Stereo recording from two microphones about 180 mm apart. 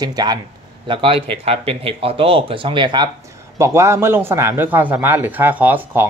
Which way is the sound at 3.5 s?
15° right (ahead or behind).